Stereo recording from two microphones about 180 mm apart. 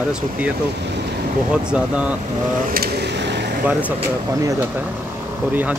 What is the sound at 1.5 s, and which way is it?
Speech, 5° right (ahead or behind).